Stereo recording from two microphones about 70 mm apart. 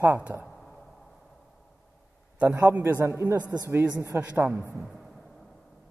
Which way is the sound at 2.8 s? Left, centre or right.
Right.